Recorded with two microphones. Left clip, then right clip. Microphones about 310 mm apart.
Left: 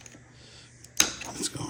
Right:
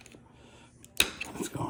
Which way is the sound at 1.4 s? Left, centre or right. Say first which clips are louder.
Left 1 dB; centre.